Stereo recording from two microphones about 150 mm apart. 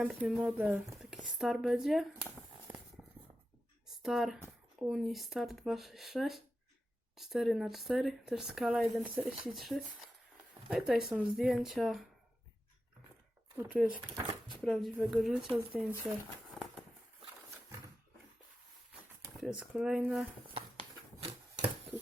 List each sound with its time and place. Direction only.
0.0 s speech: 5° right (ahead or behind)
3.8 s a sound: centre (ahead or behind)
4.8 s speech: centre (ahead or behind)
13.6 s speech: 5° right (ahead or behind)
19.4 s speech: 5° right (ahead or behind)
20.5 s a sound: 40° right (ahead or behind)